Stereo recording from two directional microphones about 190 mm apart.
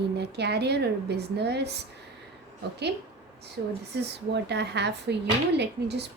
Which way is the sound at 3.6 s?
65° right (ahead or behind).